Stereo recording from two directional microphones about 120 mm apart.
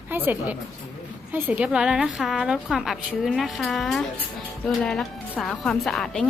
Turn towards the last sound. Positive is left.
turn(degrees=5)  # may be behind; listen again after turning